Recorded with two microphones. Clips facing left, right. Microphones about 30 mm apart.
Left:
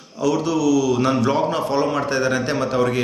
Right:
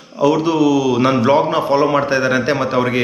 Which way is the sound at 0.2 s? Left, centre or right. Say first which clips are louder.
Right 6 dB; right.